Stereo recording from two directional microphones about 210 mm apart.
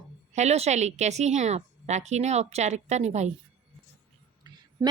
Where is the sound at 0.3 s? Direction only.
30° right (ahead or behind).